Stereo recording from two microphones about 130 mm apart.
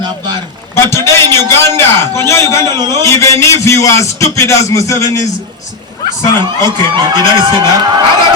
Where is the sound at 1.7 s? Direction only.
20° left (ahead or behind).